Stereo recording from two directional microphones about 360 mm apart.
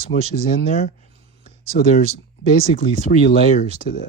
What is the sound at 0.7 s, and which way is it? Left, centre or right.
Speech, centre.